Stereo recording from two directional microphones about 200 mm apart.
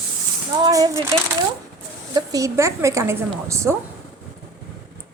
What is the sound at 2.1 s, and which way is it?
A woman's voice, 15° right (ahead or behind).